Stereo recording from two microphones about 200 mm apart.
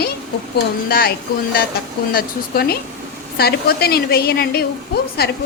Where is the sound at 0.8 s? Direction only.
50° left (ahead or behind).